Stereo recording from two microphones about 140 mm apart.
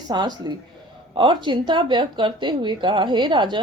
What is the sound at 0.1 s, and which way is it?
A woman's voice, 30° right (ahead or behind).